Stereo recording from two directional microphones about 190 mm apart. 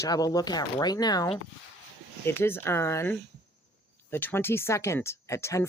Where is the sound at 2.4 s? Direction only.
10° left (ahead or behind).